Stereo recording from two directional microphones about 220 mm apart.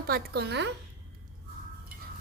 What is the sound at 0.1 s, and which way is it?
Speech, 50° right (ahead or behind).